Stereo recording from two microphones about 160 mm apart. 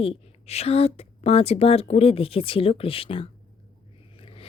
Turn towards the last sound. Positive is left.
turn(degrees=35)  # may be behind; listen again after turning